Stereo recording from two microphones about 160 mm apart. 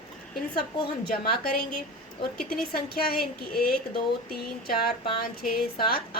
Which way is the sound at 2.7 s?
75° left (ahead or behind).